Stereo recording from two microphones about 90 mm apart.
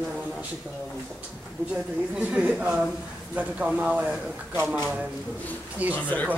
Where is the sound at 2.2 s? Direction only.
15° right (ahead or behind).